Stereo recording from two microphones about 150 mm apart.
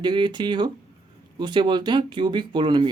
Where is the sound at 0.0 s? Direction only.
30° right (ahead or behind).